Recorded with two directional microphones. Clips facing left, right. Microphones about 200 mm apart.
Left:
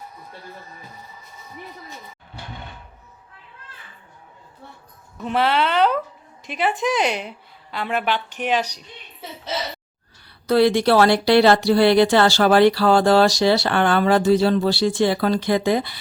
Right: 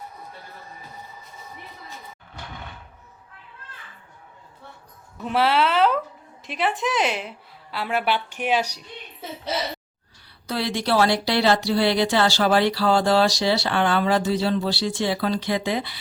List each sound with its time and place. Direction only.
5.2 s a woman's voice: 5° right (ahead or behind)
10.4 s speech: 55° left (ahead or behind)